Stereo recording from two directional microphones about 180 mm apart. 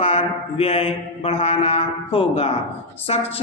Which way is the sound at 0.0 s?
30° left (ahead or behind).